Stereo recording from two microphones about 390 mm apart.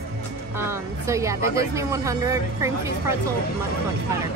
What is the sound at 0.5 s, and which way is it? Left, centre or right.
Speech, centre.